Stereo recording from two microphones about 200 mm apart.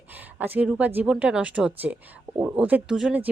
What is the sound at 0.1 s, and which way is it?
Speech, 10° right (ahead or behind).